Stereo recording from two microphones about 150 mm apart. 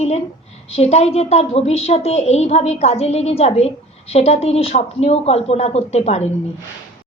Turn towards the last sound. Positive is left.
turn(degrees=45)  # may be behind; listen again after turning